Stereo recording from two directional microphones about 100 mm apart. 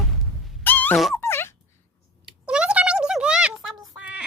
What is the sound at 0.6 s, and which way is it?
Dog, 20° left (ahead or behind).